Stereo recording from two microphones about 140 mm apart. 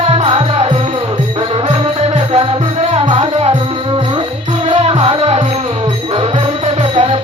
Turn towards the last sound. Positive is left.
turn(degrees=-45)  # may be behind; listen again after turning